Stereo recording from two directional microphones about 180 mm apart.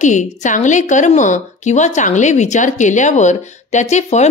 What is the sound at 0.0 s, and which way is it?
A woman's voice, 45° left (ahead or behind).